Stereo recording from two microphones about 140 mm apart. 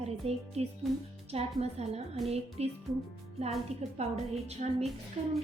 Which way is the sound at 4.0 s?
50° right (ahead or behind).